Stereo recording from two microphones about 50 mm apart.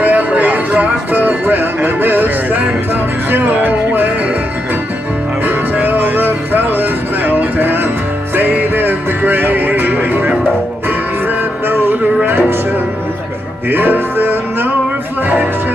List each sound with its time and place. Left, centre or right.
0.0 s music: right
5.8 s music: right
11.7 s music: right
13.7 s music: right